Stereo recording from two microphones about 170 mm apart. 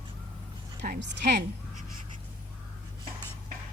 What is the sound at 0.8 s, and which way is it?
Speech, 65° right (ahead or behind).